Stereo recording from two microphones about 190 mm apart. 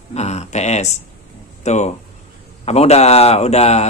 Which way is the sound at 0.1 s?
35° left (ahead or behind).